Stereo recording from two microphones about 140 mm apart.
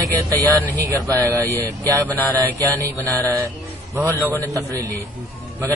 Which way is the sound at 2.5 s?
25° right (ahead or behind).